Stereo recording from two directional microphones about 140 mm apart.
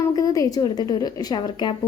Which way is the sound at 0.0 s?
25° left (ahead or behind).